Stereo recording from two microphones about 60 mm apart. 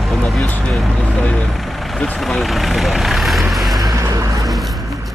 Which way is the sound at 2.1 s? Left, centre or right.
Centre.